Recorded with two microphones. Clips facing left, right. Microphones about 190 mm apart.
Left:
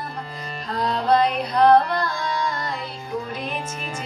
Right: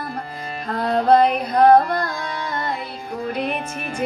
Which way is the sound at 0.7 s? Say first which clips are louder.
Right 4 dB; 55° right (ahead or behind).